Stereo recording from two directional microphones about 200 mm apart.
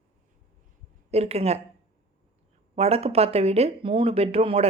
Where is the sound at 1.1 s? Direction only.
30° right (ahead or behind).